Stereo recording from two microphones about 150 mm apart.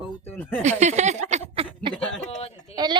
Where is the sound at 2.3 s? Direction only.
45° left (ahead or behind).